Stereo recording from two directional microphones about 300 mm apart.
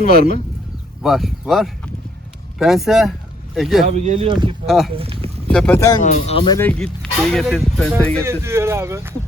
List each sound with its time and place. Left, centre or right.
0.0 s speech: left
1.0 s speech: centre
3.8 s speech: right
4.6 s speech: centre
4.9 s speech: centre
5.5 s speech: centre
6.0 s speech: left; by 8.2 s centre
8.2 s speech: centre